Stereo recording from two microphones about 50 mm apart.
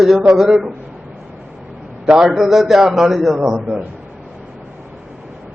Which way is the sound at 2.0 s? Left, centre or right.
Centre.